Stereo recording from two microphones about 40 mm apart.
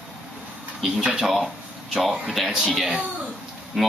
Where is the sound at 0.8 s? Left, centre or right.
Centre.